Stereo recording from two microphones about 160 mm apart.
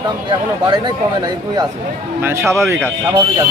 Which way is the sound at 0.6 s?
30° right (ahead or behind).